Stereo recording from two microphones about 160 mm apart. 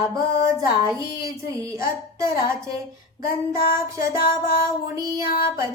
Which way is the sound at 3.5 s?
20° right (ahead or behind).